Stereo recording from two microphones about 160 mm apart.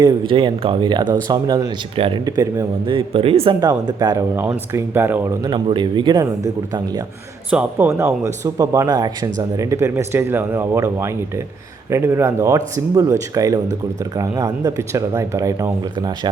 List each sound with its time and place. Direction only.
0.0 s speech: 30° right (ahead or behind)
2.9 s speech: 35° right (ahead or behind)
3.6 s speech: 25° right (ahead or behind)
4.4 s speech: 15° right (ahead or behind)
5.5 s speech: 30° right (ahead or behind)
7.5 s speech: 10° right (ahead or behind); by 16.3 s 25° right (ahead or behind)